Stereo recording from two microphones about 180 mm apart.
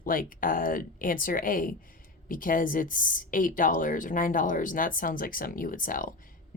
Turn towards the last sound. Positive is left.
turn(degrees=50)  # may be behind; listen again after turning